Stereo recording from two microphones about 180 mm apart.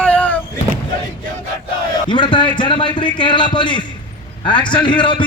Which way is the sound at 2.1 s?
25° left (ahead or behind).